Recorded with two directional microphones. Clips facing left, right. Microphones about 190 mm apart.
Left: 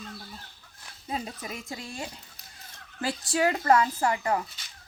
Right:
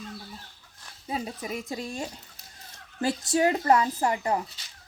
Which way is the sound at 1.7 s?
40° right (ahead or behind).